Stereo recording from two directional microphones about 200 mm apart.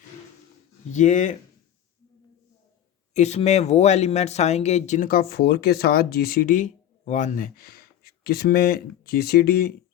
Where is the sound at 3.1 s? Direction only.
35° left (ahead or behind); by 9.7 s 50° left (ahead or behind).